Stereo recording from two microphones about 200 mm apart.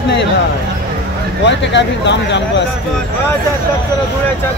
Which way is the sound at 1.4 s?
60° left (ahead or behind).